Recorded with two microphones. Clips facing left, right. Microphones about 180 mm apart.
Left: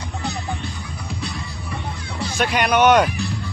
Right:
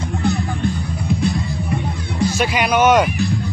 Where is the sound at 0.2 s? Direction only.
50° right (ahead or behind).